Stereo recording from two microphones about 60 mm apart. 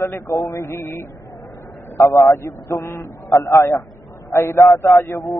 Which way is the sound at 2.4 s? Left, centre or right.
Left.